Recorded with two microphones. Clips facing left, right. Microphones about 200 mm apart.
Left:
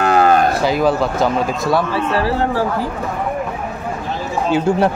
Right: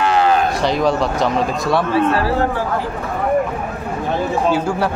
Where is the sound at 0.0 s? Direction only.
45° left (ahead or behind).